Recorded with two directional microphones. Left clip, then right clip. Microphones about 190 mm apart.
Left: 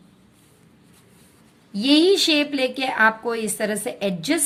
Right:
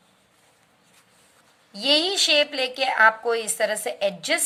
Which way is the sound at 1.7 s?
10° right (ahead or behind).